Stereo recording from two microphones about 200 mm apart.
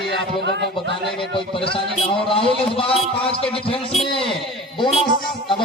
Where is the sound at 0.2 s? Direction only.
60° right (ahead or behind).